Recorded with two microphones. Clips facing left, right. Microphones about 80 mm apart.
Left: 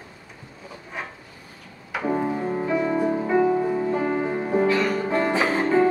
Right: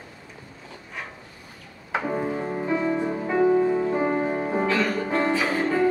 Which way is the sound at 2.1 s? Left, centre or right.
Centre.